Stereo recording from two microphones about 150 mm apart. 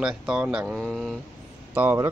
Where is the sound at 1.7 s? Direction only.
10° right (ahead or behind).